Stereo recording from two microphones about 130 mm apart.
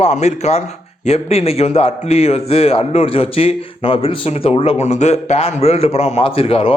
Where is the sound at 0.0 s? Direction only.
60° left (ahead or behind).